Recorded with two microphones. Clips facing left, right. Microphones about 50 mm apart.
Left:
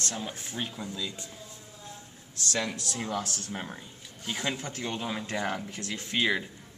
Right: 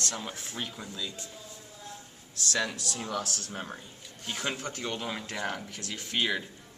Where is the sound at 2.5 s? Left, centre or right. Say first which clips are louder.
Even; left.